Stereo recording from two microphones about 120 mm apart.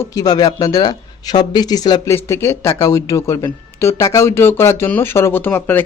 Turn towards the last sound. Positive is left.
turn(degrees=15)  # may be behind; listen again after turning